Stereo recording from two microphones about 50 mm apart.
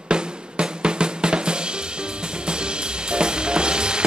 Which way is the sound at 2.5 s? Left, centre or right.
Centre.